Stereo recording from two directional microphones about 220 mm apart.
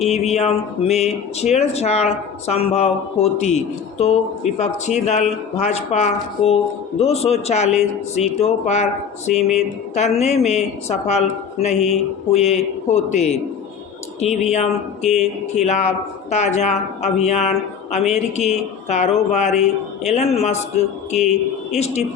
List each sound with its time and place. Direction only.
0.0 s speech: 30° left (ahead or behind)